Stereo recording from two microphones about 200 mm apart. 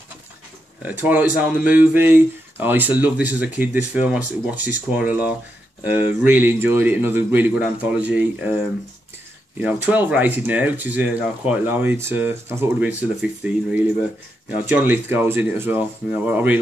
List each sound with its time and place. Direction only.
0.8 s speech: 10° right (ahead or behind)
9.6 s speech: 10° right (ahead or behind)